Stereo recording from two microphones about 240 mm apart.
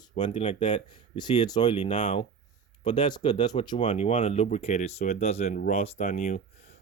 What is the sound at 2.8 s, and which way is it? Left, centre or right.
Speech, centre.